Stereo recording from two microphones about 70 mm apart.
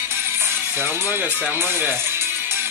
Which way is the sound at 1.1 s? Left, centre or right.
Right.